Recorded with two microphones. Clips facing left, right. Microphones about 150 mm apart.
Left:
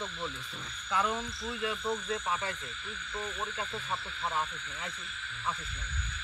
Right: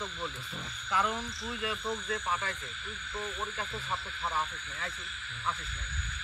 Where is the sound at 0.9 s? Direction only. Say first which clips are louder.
Even; 25° left (ahead or behind).